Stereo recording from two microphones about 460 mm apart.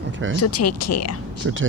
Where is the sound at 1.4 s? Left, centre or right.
Right.